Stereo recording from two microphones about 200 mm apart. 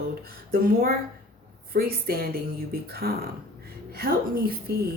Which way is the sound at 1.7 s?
50° right (ahead or behind).